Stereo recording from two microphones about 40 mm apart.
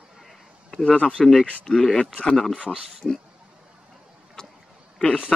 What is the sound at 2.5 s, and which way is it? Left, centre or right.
Speech, right.